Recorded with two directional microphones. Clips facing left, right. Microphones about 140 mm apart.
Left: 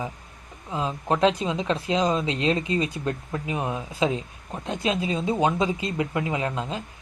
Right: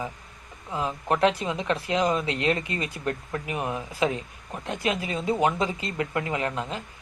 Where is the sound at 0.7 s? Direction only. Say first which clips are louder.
Left 1 dB; 20° left (ahead or behind).